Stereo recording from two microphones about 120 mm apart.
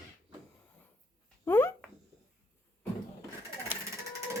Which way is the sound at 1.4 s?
20° left (ahead or behind).